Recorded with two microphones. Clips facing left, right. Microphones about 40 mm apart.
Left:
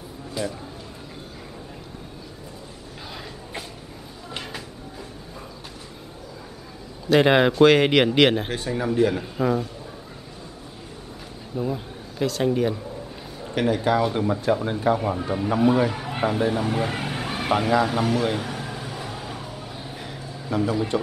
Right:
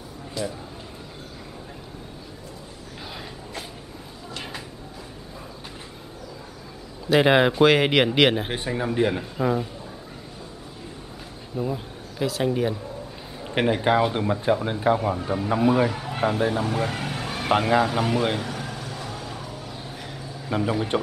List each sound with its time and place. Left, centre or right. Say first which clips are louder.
0.4 s a man's voice: left 1 dB; centre
4.4 s a sound: left 1 dB; centre
7.1 s speech: left 1 dB; centre
8.5 s speech: left 1 dB; centre
9.2 s speech: left 1 dB; centre
11.5 s speech: left 1 dB; centre
13.7 s speech: right 1 dB; right
15.0 s speech: even; centre
15.9 s a sound: even; centre
16.3 s speech: even; centre
16.6 s vehicle: left 1 dB; centre
17.5 s speech: right 1 dB; centre
18.4 s vehicle: left 1 dB; centre
20.4 s speech: left 1 dB; centre